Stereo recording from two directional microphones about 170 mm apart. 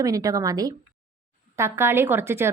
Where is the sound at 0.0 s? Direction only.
20° right (ahead or behind).